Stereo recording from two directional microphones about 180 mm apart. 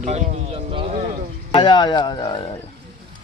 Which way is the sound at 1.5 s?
25° left (ahead or behind).